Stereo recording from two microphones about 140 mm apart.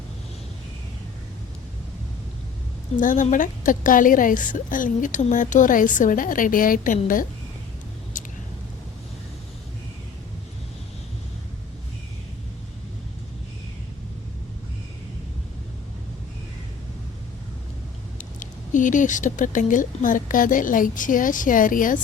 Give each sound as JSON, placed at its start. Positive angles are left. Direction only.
{"t": 3.0, "sound": "speech", "side_deg": 70}
{"t": 8.1, "sound": "a sound", "side_deg": 65}
{"t": 18.2, "sound": "speech", "side_deg": 65}